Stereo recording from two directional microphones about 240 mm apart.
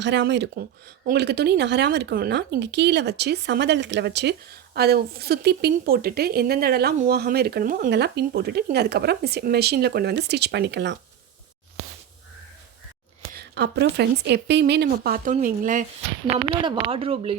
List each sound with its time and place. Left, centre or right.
0.0 s speech: right
13.3 s speech: right
16.5 s speech: right